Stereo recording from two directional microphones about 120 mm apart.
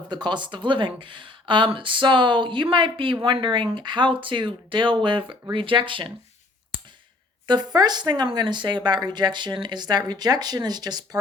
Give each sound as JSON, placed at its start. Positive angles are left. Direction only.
{"t": 0.1, "sound": "speech", "side_deg": -40}
{"t": 6.7, "sound": "clicking", "side_deg": -40}
{"t": 7.4, "sound": "speech", "side_deg": -35}